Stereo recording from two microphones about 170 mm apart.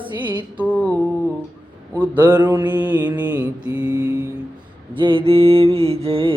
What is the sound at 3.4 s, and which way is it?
Mantra, 30° left (ahead or behind).